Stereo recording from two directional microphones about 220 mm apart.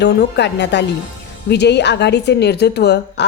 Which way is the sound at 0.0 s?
50° left (ahead or behind).